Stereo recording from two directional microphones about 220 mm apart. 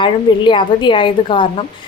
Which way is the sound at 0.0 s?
20° left (ahead or behind).